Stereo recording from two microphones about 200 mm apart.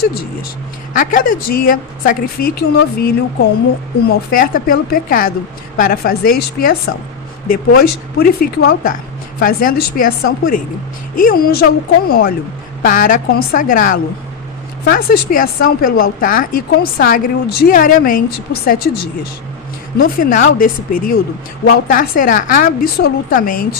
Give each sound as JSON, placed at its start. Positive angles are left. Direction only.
{"t": 0.9, "sound": "speech", "side_deg": 45}
{"t": 11.1, "sound": "a woman's voice", "side_deg": 45}